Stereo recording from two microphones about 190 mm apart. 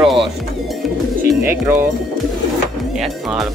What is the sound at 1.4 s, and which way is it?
Speech, 10° right (ahead or behind).